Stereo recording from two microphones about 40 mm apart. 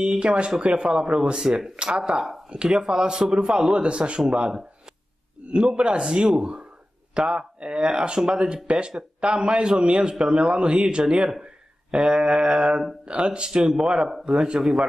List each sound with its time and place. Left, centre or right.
0.0 s a man's voice: right
5.5 s a man's voice: right